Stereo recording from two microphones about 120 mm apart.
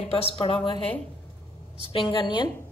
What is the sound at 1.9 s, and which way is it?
Speech, 45° left (ahead or behind).